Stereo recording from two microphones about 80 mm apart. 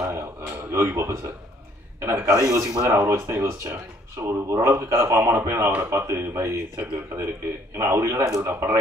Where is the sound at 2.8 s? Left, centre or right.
Right.